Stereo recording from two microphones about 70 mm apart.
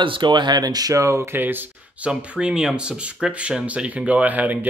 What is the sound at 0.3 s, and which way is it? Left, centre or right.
Speech, right.